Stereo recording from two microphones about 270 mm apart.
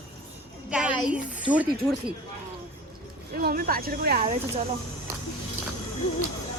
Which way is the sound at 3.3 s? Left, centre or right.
Right.